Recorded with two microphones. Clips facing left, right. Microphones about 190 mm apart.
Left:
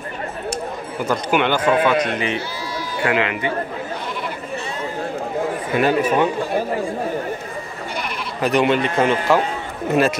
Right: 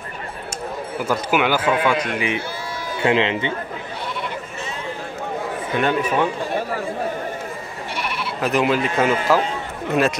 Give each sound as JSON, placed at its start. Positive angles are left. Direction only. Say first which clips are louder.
{"t": 1.0, "sound": "a man's voice", "louder": "left 1 dB", "side_deg": -5}
{"t": 3.0, "sound": "a man's voice", "louder": "right 2 dB", "side_deg": -25}
{"t": 5.8, "sound": "a man's voice", "louder": "left 3 dB", "side_deg": 5}
{"t": 8.0, "sound": "speech", "louder": "left 1 dB", "side_deg": 0}